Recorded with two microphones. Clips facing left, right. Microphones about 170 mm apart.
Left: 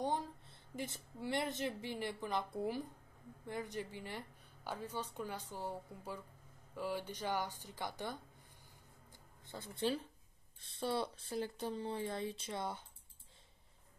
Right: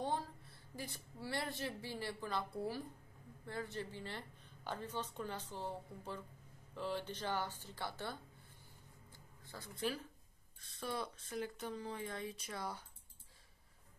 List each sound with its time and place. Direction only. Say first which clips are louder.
0.0 s a woman's voice: left 2 dB; 15° left (ahead or behind)
9.1 s music: left 4 dB; 20° left (ahead or behind)
10.6 s speech: left 5 dB; 30° left (ahead or behind)